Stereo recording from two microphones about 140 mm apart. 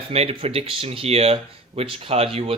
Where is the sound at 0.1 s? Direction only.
45° right (ahead or behind).